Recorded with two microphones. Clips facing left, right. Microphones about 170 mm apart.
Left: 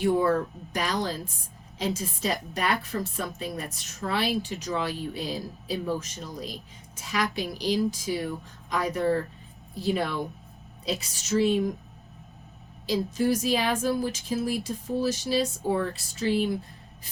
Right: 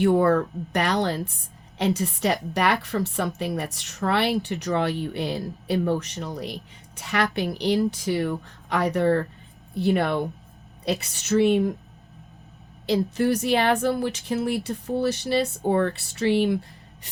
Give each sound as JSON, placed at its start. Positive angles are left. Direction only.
{"t": 0.0, "sound": "a woman's voice", "side_deg": -60}
{"t": 12.8, "sound": "speech", "side_deg": -65}